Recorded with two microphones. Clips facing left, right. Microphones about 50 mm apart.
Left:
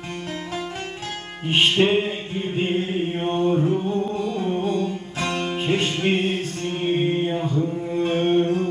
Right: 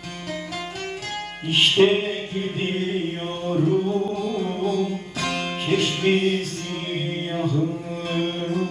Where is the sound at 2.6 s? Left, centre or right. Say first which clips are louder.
Left 3 dB; left.